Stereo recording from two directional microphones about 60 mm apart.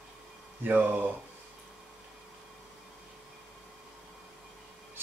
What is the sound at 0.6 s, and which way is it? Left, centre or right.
Speech, right.